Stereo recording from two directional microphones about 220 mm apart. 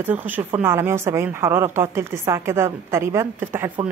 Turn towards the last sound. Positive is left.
turn(degrees=-10)  # may be behind; listen again after turning